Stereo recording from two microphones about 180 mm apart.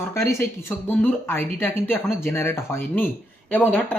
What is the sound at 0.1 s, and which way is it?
Speech, 15° left (ahead or behind).